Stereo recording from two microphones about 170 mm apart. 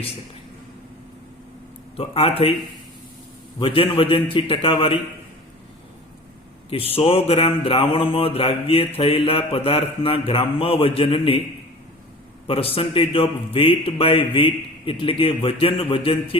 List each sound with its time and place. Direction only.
2.0 s mantra: 35° left (ahead or behind)
3.6 s mantra: 30° left (ahead or behind)
6.7 s mantra: 35° left (ahead or behind)
12.5 s mantra: 35° left (ahead or behind)